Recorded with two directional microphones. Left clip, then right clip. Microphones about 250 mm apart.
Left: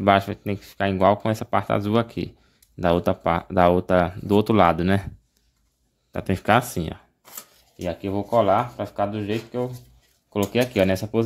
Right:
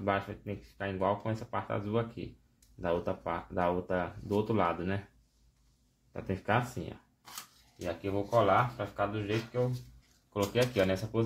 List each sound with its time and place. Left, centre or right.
0.0 s speech: left
6.1 s speech: left
10.3 s speech: left